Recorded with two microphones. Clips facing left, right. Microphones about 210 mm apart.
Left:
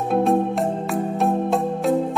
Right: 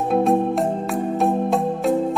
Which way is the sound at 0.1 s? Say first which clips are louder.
Right 1 dB; centre (ahead or behind).